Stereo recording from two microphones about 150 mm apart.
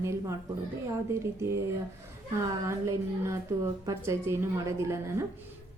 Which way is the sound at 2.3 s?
20° right (ahead or behind).